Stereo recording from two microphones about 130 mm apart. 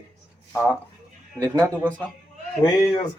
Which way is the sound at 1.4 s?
20° right (ahead or behind).